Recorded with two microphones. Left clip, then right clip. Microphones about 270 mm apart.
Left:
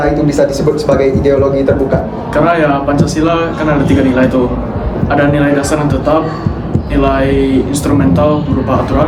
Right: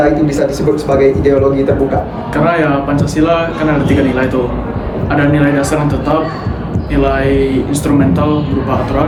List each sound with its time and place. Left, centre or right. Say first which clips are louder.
0.0 s a man's voice: even; centre
2.3 s a man's voice: left 2 dB; centre